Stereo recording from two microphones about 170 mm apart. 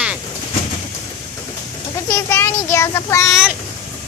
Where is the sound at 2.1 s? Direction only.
15° left (ahead or behind).